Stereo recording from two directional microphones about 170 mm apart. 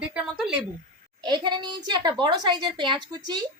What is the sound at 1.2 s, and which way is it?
A woman's voice, 25° right (ahead or behind).